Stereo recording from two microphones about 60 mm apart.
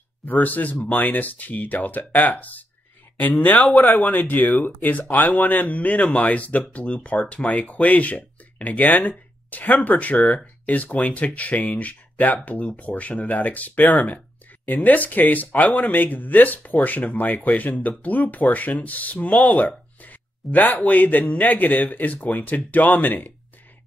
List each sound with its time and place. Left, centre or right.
0.2 s speech: left